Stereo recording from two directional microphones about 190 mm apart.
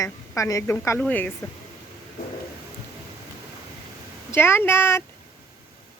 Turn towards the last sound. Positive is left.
turn(degrees=10)  # may be behind; listen again after turning